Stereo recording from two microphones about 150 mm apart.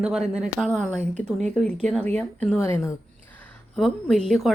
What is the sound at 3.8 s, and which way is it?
Speech, centre (ahead or behind).